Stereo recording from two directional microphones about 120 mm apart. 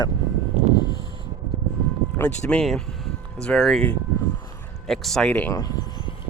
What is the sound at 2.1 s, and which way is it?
Speech, 10° left (ahead or behind).